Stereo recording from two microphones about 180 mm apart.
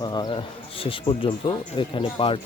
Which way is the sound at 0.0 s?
25° left (ahead or behind).